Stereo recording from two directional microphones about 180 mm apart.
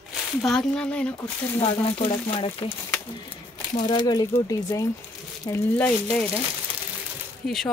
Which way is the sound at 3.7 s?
25° left (ahead or behind).